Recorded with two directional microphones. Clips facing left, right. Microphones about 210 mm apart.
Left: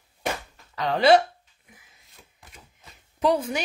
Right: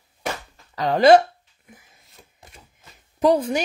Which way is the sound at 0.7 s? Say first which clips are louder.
Right 4 dB; 45° right (ahead or behind).